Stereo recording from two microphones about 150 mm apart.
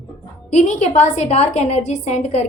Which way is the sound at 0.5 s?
50° left (ahead or behind).